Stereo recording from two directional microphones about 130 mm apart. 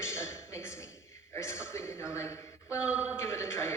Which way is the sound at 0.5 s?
20° left (ahead or behind).